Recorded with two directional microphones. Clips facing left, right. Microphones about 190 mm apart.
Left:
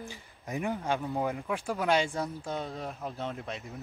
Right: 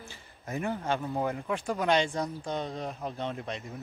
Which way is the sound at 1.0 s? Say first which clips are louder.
Even; centre (ahead or behind).